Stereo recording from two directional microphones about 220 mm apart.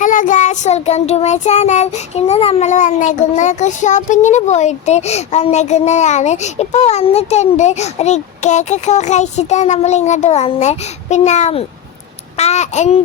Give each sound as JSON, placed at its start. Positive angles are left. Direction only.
{"t": 0.0, "sound": "child singing", "side_deg": 35}